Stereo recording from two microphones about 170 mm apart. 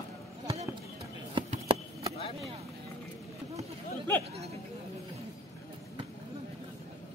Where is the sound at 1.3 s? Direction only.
30° right (ahead or behind).